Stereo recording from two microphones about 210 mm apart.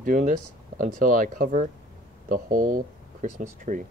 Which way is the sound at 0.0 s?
40° right (ahead or behind).